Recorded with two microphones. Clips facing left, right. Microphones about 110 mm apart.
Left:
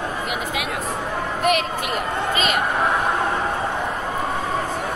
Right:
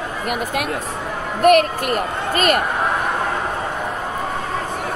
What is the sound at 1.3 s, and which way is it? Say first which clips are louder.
Speech: right 9 dB; 50° right (ahead or behind).